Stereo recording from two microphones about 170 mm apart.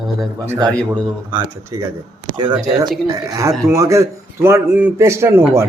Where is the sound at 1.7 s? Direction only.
20° right (ahead or behind).